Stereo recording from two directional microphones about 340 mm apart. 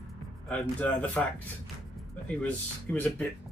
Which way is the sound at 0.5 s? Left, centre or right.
Centre.